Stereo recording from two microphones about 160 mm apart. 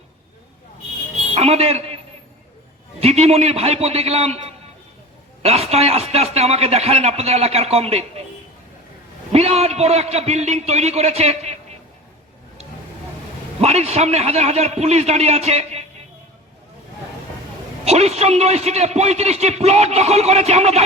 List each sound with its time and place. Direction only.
1.3 s a man's voice: 40° right (ahead or behind)
3.0 s a man's voice: 40° right (ahead or behind)
9.3 s a man's voice: 40° right (ahead or behind)
13.6 s a man's voice: 40° right (ahead or behind)
17.8 s a man's voice: 40° right (ahead or behind)